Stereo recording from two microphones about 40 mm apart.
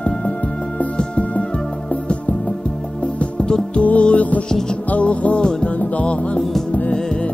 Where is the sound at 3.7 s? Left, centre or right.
Left.